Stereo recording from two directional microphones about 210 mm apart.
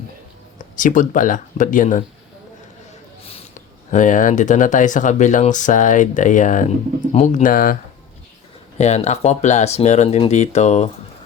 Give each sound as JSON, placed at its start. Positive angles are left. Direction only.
{"t": 0.6, "sound": "speech", "side_deg": 40}
{"t": 3.9, "sound": "speech", "side_deg": 40}
{"t": 8.8, "sound": "speech", "side_deg": 30}